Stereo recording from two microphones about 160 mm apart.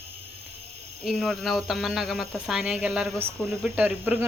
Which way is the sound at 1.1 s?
Centre (ahead or behind).